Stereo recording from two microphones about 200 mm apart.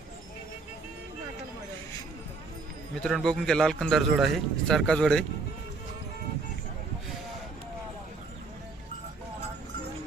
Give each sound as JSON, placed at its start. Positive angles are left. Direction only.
{"t": 2.9, "sound": "a man's voice", "side_deg": 0}